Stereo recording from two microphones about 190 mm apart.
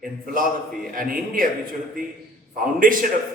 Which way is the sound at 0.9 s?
45° right (ahead or behind).